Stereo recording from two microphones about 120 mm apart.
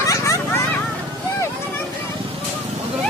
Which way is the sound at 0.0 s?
25° left (ahead or behind).